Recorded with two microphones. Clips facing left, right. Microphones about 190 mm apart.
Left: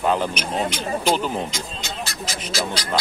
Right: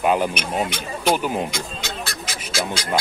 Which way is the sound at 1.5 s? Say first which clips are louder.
Right 2 dB; 60° right (ahead or behind).